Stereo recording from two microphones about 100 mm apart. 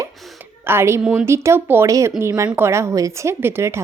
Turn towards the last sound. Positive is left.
turn(degrees=-25)  # may be behind; listen again after turning